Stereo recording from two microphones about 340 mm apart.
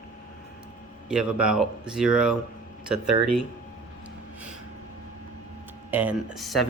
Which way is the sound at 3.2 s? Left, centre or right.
Right.